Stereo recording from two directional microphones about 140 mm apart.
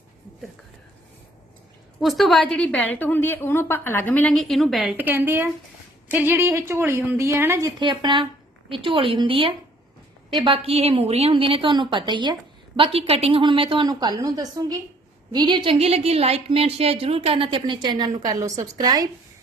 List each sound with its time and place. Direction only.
2.0 s a woman's voice: centre (ahead or behind)
4.9 s speech: 15° right (ahead or behind)
7.8 s a woman's voice: 35° right (ahead or behind)